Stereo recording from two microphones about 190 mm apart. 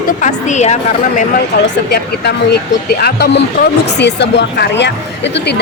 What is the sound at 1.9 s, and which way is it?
Speech, 60° left (ahead or behind).